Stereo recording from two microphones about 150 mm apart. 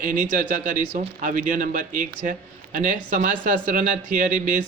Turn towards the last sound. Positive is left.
turn(degrees=-60)  # may be behind; listen again after turning